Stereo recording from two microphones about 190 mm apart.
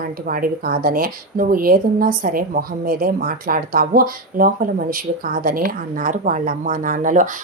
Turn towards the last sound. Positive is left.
turn(degrees=-45)  # may be behind; listen again after turning